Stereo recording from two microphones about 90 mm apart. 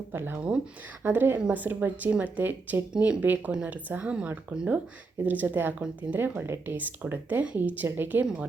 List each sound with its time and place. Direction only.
0.1 s speech: 25° right (ahead or behind)